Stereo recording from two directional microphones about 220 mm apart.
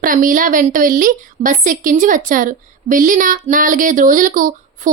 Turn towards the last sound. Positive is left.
turn(degrees=-35)  # may be behind; listen again after turning